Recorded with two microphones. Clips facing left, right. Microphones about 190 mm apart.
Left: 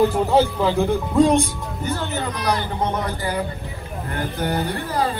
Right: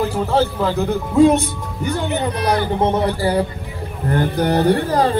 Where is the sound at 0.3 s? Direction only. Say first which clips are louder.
Even; 10° left (ahead or behind).